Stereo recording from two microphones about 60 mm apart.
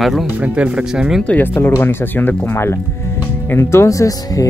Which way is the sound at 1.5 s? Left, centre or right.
Left.